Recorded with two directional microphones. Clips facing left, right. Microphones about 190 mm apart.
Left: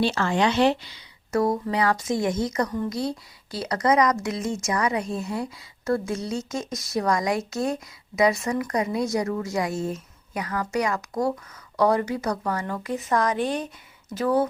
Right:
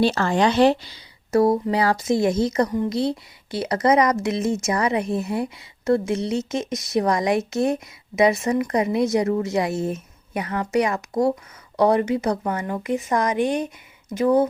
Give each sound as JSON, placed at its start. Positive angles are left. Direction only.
{"t": 0.0, "sound": "a woman's voice", "side_deg": -40}